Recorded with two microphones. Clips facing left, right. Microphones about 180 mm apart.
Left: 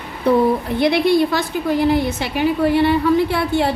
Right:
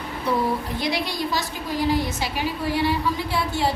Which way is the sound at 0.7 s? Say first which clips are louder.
Left 11 dB; 60° left (ahead or behind).